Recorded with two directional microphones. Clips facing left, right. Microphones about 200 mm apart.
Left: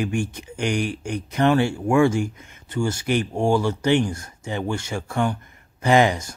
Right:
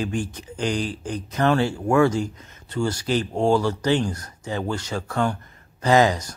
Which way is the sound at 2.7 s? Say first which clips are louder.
Left 1 dB; 25° left (ahead or behind).